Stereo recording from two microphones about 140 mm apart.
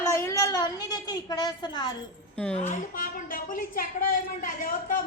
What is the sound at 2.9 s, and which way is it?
A woman's voice, 85° left.